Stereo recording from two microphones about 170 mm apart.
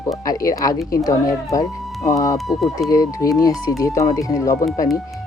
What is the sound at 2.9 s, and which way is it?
Speech, 20° left (ahead or behind).